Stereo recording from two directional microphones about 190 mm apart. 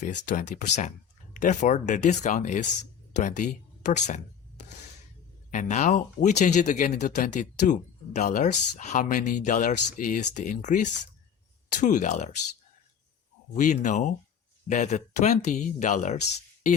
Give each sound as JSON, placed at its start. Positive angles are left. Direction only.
{"t": 0.0, "sound": "speech", "side_deg": 40}
{"t": 3.1, "sound": "a sound", "side_deg": 40}
{"t": 5.5, "sound": "speech", "side_deg": 40}
{"t": 13.5, "sound": "speech", "side_deg": 40}